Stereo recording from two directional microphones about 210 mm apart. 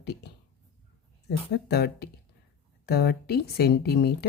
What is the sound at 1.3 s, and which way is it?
Speech, 50° left (ahead or behind).